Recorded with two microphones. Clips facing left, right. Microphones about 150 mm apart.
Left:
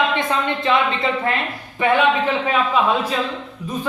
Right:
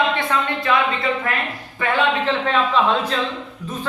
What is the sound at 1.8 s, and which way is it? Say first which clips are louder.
Speech: left 3 dB; 10° left (ahead or behind).